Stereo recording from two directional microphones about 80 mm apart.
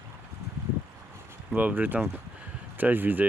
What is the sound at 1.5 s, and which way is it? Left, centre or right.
Speech, centre.